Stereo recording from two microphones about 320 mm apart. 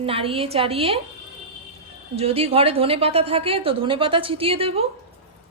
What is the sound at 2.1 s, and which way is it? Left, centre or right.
Speech, centre.